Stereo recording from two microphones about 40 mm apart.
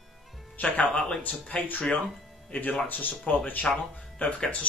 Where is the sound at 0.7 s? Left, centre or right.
Left.